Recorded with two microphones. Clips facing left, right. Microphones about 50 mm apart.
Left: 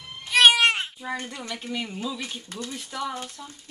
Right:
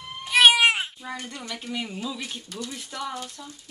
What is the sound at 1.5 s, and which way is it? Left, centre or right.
Speech, centre.